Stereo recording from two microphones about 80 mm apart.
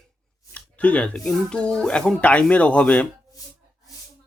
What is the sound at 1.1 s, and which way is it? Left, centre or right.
Speech, centre.